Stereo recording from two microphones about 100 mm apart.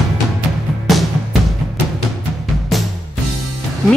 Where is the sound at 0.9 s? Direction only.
Centre (ahead or behind).